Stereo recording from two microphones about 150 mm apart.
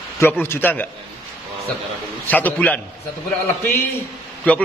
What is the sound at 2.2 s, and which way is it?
Speech, 10° left (ahead or behind).